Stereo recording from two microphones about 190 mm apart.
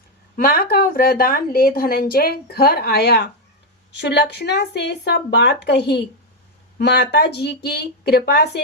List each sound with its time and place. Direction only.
0.3 s speech: 50° left (ahead or behind)